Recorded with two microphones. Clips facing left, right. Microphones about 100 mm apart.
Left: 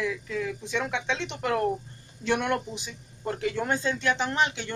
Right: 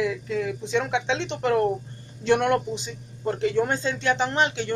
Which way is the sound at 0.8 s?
5° right (ahead or behind).